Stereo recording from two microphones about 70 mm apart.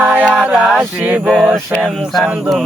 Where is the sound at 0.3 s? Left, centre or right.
Centre.